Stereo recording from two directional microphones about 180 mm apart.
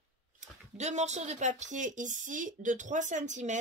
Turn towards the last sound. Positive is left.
turn(degrees=-40)  # may be behind; listen again after turning